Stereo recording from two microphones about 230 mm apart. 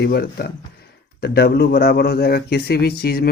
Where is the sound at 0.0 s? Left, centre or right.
Left.